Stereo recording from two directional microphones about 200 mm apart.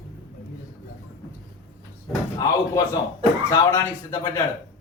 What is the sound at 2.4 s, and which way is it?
Speech, 15° left (ahead or behind).